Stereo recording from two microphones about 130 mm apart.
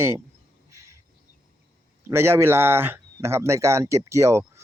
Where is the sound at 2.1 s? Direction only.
20° right (ahead or behind).